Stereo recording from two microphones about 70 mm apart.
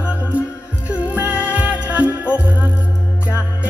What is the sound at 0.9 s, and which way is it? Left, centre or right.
Music, right.